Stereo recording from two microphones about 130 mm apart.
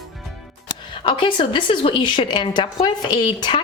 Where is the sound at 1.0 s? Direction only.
40° left (ahead or behind).